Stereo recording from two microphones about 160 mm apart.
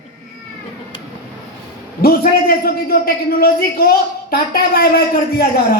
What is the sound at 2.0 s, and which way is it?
A man's voice, 70° left (ahead or behind).